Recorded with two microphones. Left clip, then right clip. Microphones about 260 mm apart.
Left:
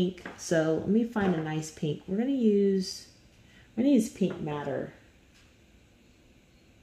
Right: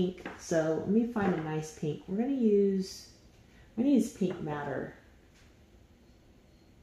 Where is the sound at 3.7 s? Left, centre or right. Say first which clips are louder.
Left 3 dB; left.